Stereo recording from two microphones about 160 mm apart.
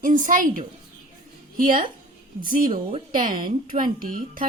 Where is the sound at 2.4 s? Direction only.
60° right (ahead or behind).